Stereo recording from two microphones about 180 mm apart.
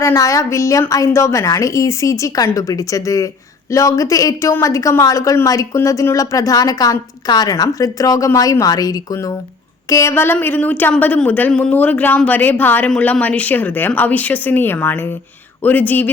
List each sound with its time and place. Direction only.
0.0 s a woman's voice: 15° left (ahead or behind)